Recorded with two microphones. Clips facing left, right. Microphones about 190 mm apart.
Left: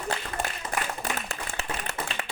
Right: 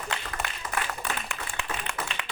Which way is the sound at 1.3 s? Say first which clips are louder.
Left 1 dB; 40° left (ahead or behind).